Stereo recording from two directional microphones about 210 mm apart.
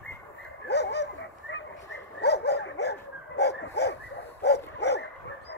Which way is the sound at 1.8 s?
55° left (ahead or behind).